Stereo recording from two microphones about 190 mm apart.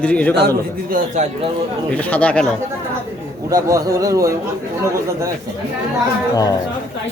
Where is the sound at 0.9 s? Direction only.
40° right (ahead or behind).